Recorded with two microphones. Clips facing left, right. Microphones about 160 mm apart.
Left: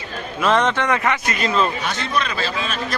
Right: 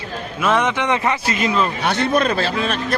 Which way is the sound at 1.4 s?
15° right (ahead or behind).